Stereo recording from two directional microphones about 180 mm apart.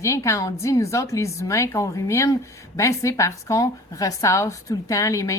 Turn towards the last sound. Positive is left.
turn(degrees=15)  # may be behind; listen again after turning